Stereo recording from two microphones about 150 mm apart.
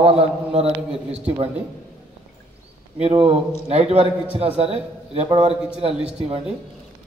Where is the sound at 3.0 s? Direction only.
40° right (ahead or behind).